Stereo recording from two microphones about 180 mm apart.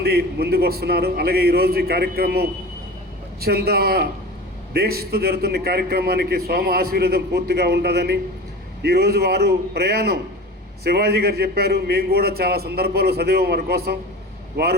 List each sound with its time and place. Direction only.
0.0 s a man's voice: 60° right (ahead or behind)